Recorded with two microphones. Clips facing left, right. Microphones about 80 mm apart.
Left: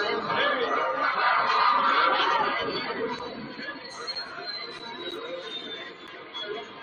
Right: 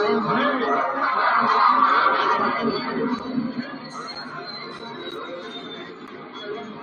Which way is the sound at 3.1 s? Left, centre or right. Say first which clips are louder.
Right 7 dB; centre.